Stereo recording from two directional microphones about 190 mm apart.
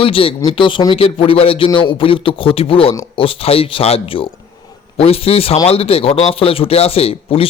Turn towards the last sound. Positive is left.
turn(degrees=30)  # may be behind; listen again after turning